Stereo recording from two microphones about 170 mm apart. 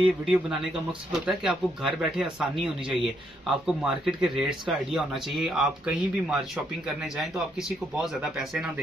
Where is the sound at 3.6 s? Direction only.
5° right (ahead or behind).